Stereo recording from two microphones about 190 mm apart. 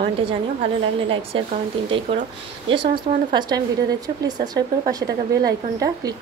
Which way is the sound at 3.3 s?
20° right (ahead or behind).